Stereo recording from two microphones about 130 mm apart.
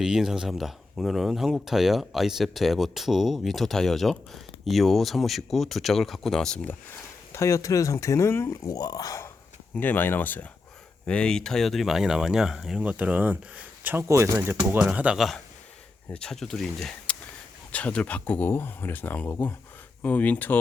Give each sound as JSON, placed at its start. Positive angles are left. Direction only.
{"t": 0.0, "sound": "speech", "side_deg": -5}
{"t": 7.3, "sound": "speech", "side_deg": 25}
{"t": 9.7, "sound": "speech", "side_deg": 15}
{"t": 14.6, "sound": "speech", "side_deg": -10}
{"t": 16.0, "sound": "speech", "side_deg": 5}